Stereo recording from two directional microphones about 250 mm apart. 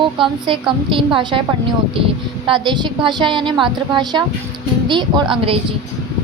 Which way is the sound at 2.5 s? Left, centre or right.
Centre.